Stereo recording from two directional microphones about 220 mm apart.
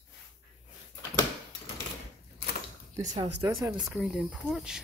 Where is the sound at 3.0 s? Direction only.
30° right (ahead or behind).